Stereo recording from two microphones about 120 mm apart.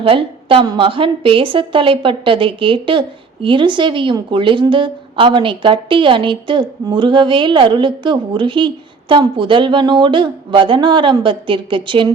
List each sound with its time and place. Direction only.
0.0 s a woman's voice: 50° right (ahead or behind)